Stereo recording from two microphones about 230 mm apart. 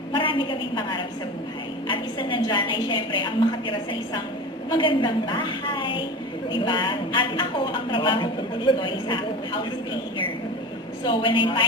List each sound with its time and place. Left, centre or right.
0.1 s a woman's voice: left
11.0 s a woman's voice: left